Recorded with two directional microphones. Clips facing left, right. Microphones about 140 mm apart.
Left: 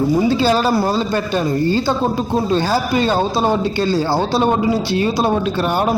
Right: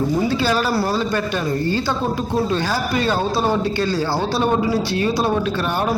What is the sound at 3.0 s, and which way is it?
A man's voice, 30° left (ahead or behind).